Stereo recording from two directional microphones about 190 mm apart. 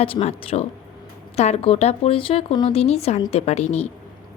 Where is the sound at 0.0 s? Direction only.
30° left (ahead or behind).